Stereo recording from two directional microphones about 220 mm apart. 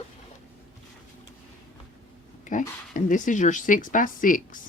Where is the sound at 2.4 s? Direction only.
35° left (ahead or behind).